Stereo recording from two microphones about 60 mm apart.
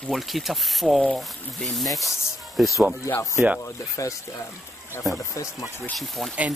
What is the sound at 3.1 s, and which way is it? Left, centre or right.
Speech, left.